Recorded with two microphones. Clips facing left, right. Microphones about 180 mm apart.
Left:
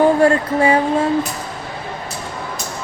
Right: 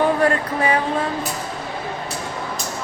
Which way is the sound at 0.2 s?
25° left (ahead or behind).